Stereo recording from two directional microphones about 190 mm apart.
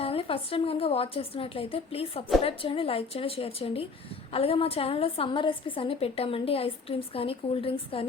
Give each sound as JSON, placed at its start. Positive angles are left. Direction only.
{"t": 0.0, "sound": "a woman's voice", "side_deg": 30}